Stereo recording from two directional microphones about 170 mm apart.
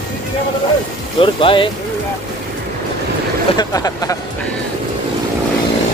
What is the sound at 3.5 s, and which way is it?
Speech, 20° left (ahead or behind).